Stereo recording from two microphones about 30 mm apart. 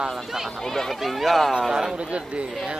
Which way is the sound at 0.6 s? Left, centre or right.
Centre.